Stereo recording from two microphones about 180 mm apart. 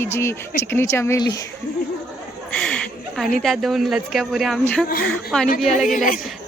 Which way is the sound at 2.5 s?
5° left (ahead or behind).